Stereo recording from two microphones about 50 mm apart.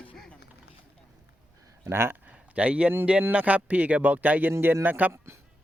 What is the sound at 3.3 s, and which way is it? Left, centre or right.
Speech, right.